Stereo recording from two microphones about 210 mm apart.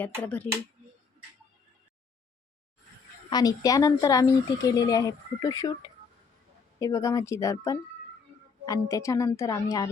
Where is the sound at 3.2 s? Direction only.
20° left (ahead or behind).